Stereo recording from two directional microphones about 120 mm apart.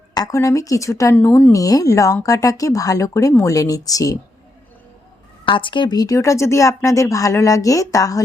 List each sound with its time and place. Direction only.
0.1 s speech: 30° left (ahead or behind)
1.5 s speech: 30° left (ahead or behind)
5.5 s speech: 45° left (ahead or behind); by 8.2 s 30° left (ahead or behind)